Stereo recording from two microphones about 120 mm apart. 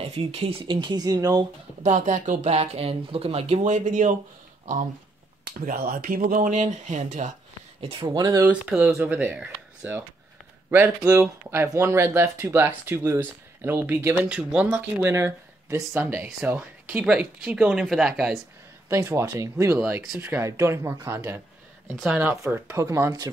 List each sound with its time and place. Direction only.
0.0 s speech: 55° right (ahead or behind); by 1.4 s 35° right (ahead or behind)
1.8 s speech: 85° right
6.0 s speech: 90° right
8.1 s speech: 30° right (ahead or behind)
8.4 s speech: 10° right (ahead or behind)
11.1 s speech: 20° right (ahead or behind)
15.1 s speech: 25° right (ahead or behind); by 18.4 s 5° right (ahead or behind)
18.9 s speech: 20° right (ahead or behind)
19.8 s speech: 5° right (ahead or behind)
20.2 s speech: 20° right (ahead or behind)
22.0 s speech: 10° right (ahead or behind)
22.4 s speech: 20° right (ahead or behind)